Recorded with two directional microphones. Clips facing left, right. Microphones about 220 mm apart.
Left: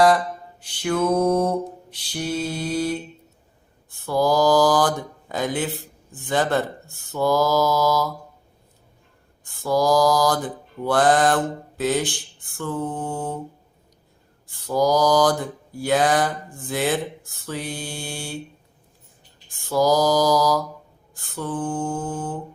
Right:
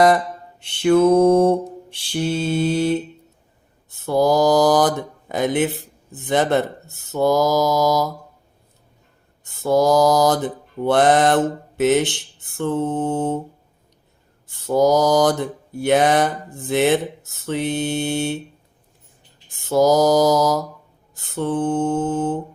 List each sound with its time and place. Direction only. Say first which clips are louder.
0.6 s speech: right 8 dB; 25° right (ahead or behind)
9.4 s speech: right 4 dB; 20° right (ahead or behind)
14.4 s speech: right 4 dB; 25° right (ahead or behind)
19.5 s speech: right 4 dB; 20° right (ahead or behind)